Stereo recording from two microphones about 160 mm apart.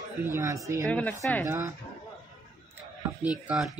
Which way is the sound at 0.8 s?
10° left (ahead or behind).